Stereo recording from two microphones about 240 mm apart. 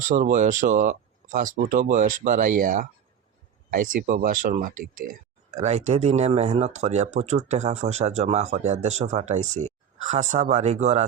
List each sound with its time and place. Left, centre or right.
0.0 s speech: right